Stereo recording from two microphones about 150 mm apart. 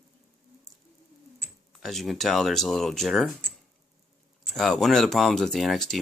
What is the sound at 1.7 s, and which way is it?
Speech, centre (ahead or behind).